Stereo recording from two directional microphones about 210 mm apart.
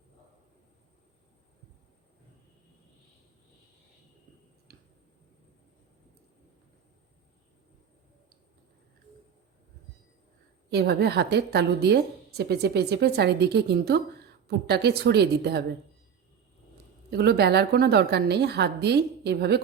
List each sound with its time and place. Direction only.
4.7 s clicking: 50° right (ahead or behind)
10.7 s a woman's voice: 50° right (ahead or behind)
17.1 s a woman's voice: 50° right (ahead or behind)